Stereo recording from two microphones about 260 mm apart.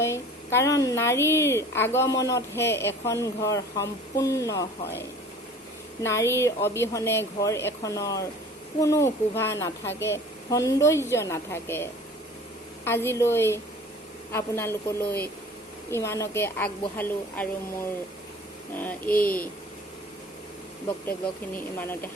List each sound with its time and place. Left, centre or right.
0.0 s a woman's voice: centre
6.0 s a woman's voice: centre
15.0 s speech: left
15.9 s a woman's voice: centre
21.5 s a woman's voice: centre